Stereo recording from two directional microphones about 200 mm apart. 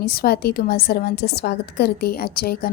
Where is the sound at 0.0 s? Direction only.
50° left (ahead or behind).